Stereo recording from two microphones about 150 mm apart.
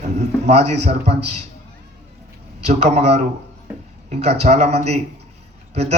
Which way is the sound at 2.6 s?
45° right (ahead or behind).